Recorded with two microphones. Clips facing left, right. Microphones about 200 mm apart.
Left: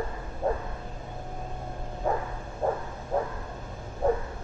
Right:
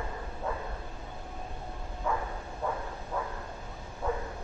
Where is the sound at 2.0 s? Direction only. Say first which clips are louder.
Left 4 dB; 40° left (ahead or behind).